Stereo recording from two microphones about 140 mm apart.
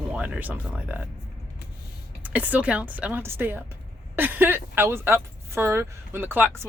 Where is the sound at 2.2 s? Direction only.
10° right (ahead or behind).